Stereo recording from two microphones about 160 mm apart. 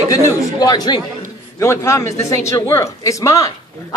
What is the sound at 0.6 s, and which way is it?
Speech, 25° left (ahead or behind).